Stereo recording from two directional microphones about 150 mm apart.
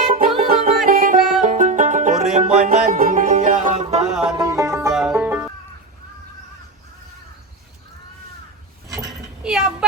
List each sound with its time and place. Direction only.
0.1 s music: 70° right (ahead or behind); by 4.0 s 55° right (ahead or behind)
4.4 s music: 20° right (ahead or behind)
4.9 s music: 5° right (ahead or behind)
9.4 s a sound: 5° right (ahead or behind)